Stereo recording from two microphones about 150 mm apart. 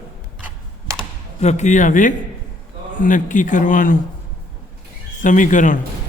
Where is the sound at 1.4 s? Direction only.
50° left (ahead or behind); by 3.9 s 65° left (ahead or behind).